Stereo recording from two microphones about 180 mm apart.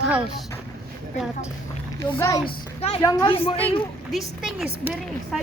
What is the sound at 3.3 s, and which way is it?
Speech, 30° left (ahead or behind).